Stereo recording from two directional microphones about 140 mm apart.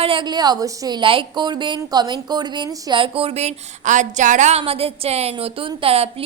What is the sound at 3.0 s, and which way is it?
A woman's voice, 45° right (ahead or behind).